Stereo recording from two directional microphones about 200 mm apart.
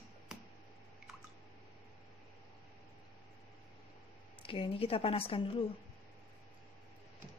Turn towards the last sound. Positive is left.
turn(degrees=25)  # may be behind; listen again after turning